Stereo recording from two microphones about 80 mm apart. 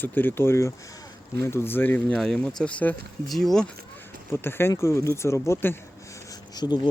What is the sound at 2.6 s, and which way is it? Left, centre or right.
Speech, centre.